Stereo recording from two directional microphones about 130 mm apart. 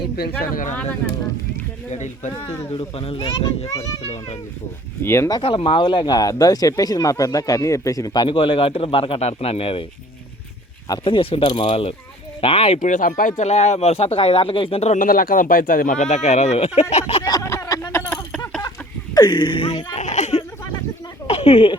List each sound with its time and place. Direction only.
0.7 s speech: 15° left (ahead or behind)
1.9 s speech: 65° left (ahead or behind)
2.4 s speech: 25° left (ahead or behind)
2.6 s speech: 45° left (ahead or behind)
4.0 s speech: 50° left (ahead or behind)
5.0 s speech: 20° left (ahead or behind)
5.4 s speech: 45° left (ahead or behind)
11.0 s speech: 45° left (ahead or behind)
12.8 s speech: 85° left; by 14.9 s 50° left (ahead or behind)
14.9 s speech: 90° left; by 17.2 s 55° left (ahead or behind)
17.2 s a sound: 25° left (ahead or behind)
19.1 s speech: 35° left (ahead or behind)
20.0 s a sound: 65° left (ahead or behind)
21.2 s a sound: 50° left (ahead or behind)